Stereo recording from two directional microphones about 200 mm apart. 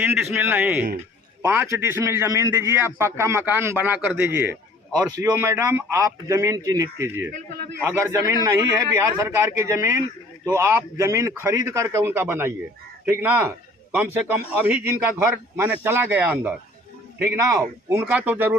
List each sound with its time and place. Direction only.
0.0 s a man's voice: 10° right (ahead or behind)